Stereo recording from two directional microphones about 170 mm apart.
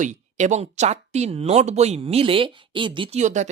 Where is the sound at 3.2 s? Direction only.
45° right (ahead or behind).